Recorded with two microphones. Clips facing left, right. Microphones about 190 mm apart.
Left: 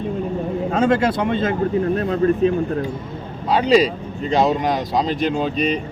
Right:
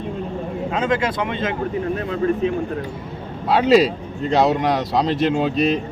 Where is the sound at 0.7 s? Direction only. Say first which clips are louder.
Left 4 dB; 45° left (ahead or behind).